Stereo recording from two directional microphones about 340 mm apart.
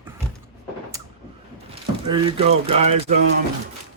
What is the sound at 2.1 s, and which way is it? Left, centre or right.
Speech, centre.